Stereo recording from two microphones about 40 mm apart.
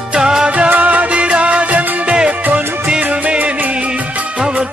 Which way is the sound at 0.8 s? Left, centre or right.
Right.